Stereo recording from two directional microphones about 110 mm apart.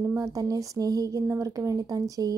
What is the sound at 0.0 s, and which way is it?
A woman's voice, 30° right (ahead or behind).